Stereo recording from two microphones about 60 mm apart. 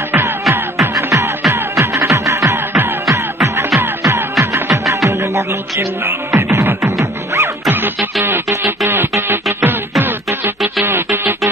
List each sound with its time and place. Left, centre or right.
0.2 s music: right
7.7 s music: right
10.8 s music: right